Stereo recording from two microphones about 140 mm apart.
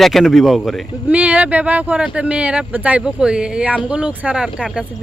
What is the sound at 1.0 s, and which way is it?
Speech, 10° right (ahead or behind).